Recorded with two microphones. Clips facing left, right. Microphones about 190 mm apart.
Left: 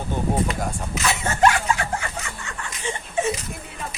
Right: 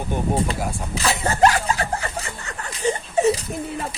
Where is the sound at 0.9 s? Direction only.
35° right (ahead or behind).